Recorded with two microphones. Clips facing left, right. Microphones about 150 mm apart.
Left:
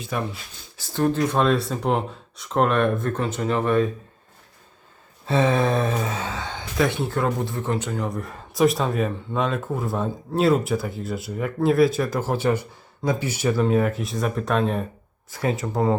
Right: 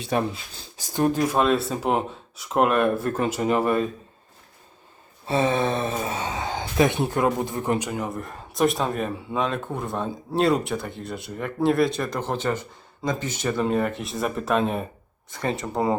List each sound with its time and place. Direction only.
0.1 s speech: 30° right (ahead or behind)
0.8 s speech: 15° right (ahead or behind)
5.4 s speech: centre (ahead or behind)